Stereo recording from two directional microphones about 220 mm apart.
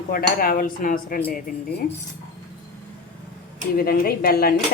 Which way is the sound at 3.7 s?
40° left (ahead or behind).